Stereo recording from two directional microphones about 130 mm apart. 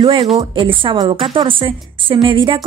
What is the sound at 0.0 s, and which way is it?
A woman's voice, 45° right (ahead or behind).